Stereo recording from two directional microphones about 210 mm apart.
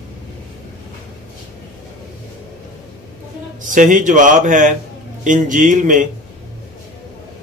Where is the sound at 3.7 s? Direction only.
40° right (ahead or behind).